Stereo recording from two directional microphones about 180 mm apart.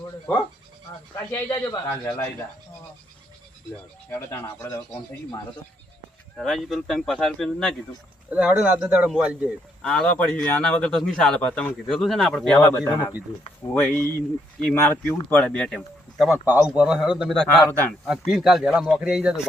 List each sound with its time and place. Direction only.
1.1 s speech: 15° left (ahead or behind)
4.1 s speech: 15° left (ahead or behind)
6.3 s speech: centre (ahead or behind)
12.7 s speech: 15° left (ahead or behind); by 19.4 s 5° right (ahead or behind)